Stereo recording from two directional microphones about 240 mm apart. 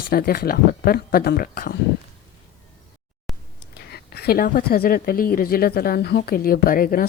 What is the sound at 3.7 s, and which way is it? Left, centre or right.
Speech, left.